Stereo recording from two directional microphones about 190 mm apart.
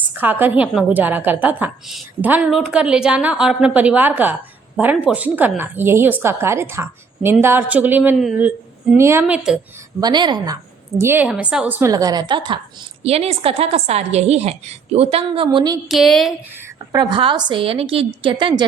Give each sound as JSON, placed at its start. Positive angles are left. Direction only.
{"t": 0.1, "sound": "speech", "side_deg": -10}
{"t": 10.0, "sound": "a woman's voice", "side_deg": -20}
{"t": 11.0, "sound": "a woman's voice", "side_deg": -10}
{"t": 15.4, "sound": "a woman's voice", "side_deg": -20}
{"t": 15.9, "sound": "speech", "side_deg": 0}
{"t": 16.9, "sound": "a woman's voice", "side_deg": -25}